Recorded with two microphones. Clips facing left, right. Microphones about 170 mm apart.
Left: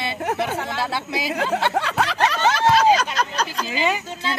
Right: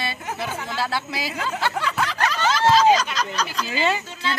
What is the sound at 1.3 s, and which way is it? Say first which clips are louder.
Speech: left 9 dB; 60° left (ahead or behind).